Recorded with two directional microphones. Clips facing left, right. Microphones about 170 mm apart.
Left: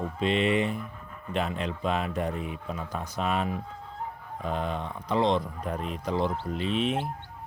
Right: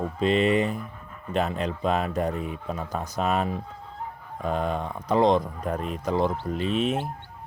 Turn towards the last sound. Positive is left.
turn(degrees=-45)  # may be behind; listen again after turning